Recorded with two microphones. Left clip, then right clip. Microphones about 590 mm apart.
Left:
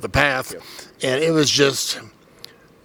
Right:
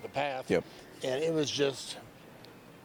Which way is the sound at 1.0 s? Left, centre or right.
Left.